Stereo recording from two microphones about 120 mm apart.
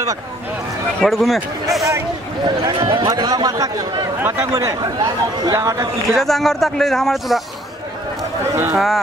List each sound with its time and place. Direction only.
0.9 s speech: centre (ahead or behind)
2.4 s speech: 40° right (ahead or behind)
6.0 s speech: centre (ahead or behind)
8.7 s speech: centre (ahead or behind)